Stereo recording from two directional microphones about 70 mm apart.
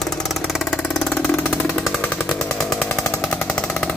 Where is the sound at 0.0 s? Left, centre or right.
Centre.